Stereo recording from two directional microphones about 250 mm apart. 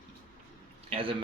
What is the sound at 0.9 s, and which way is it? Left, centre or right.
Speech, right.